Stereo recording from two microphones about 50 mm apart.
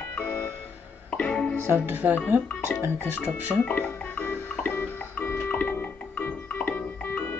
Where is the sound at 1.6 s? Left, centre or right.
Right.